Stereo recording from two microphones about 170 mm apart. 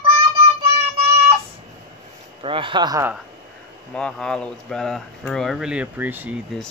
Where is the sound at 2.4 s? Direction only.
30° right (ahead or behind).